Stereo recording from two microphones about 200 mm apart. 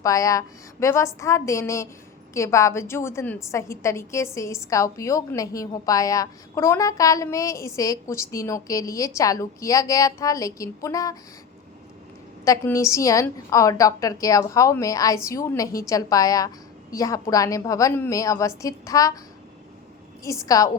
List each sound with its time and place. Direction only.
0.0 s a woman's voice: 15° left (ahead or behind)
12.5 s a woman's voice: 15° left (ahead or behind)
20.2 s a woman's voice: 15° left (ahead or behind)